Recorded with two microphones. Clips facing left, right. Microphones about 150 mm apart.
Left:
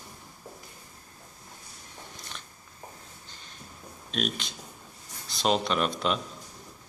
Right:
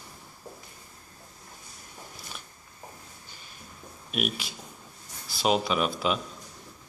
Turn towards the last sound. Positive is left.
turn(degrees=-5)  # may be behind; listen again after turning